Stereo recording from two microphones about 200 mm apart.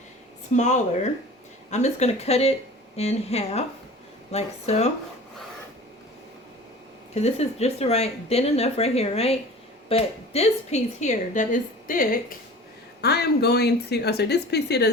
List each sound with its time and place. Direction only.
0.5 s a woman's voice: 35° left (ahead or behind)
7.1 s a woman's voice: 30° left (ahead or behind); by 14.8 s 55° left (ahead or behind)